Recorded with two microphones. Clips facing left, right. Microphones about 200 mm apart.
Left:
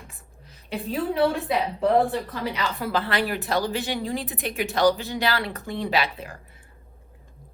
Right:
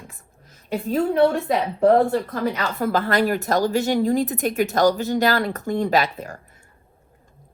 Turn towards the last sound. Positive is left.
turn(degrees=-45)  # may be behind; listen again after turning